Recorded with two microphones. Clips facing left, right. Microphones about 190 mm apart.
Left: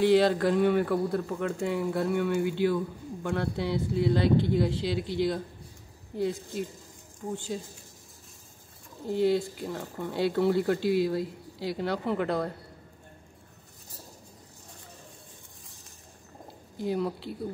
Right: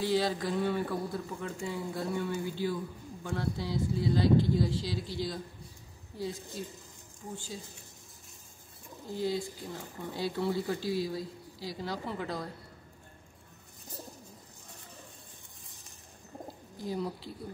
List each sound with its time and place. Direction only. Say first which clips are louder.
0.0 s speech: left 8 dB; 65° left (ahead or behind)
9.1 s speech: left 8 dB; 65° left (ahead or behind)
16.8 s speech: left 6 dB; 65° left (ahead or behind)